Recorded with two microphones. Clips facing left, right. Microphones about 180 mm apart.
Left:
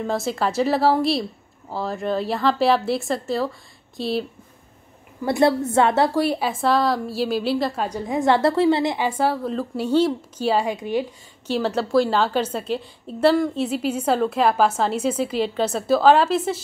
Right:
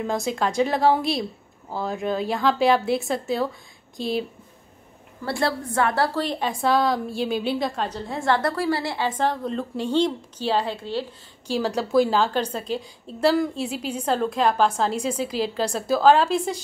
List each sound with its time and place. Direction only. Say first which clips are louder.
0.0 s a woman's voice: left 1 dB; centre (ahead or behind)
5.2 s a woman's voice: left 7 dB; 20° left (ahead or behind)
6.2 s a woman's voice: left 3 dB; 10° left (ahead or behind)
11.9 s a woman's voice: even; centre (ahead or behind)